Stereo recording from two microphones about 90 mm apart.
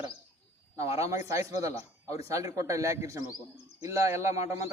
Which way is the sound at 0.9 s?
35° right (ahead or behind).